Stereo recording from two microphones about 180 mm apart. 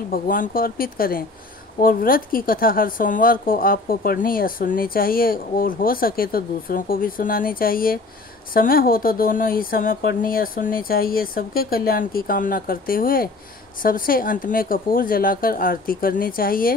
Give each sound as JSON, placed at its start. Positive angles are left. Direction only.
{"t": 0.1, "sound": "speech", "side_deg": 50}